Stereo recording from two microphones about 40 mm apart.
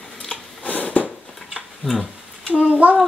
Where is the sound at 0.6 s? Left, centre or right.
Left.